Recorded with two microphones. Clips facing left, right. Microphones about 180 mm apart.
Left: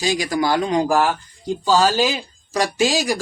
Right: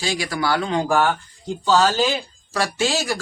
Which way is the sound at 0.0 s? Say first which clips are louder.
Left 4 dB; 15° left (ahead or behind).